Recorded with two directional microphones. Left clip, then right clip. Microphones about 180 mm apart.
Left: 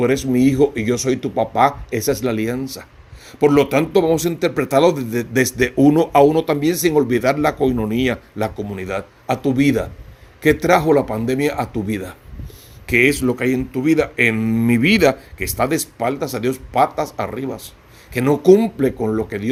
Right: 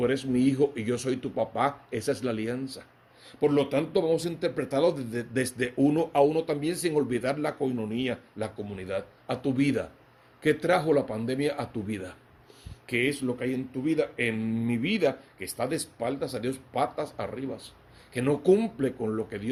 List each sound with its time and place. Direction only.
0.0 s speech: 35° left (ahead or behind)
3.4 s speech: 55° left (ahead or behind); by 12.1 s 35° left (ahead or behind)
12.8 s speech: 45° left (ahead or behind)